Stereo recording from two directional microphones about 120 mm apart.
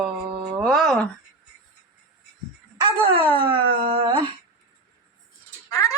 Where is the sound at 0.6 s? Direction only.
Centre (ahead or behind).